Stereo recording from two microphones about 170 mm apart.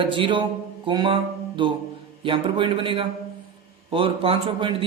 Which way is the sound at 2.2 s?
30° right (ahead or behind).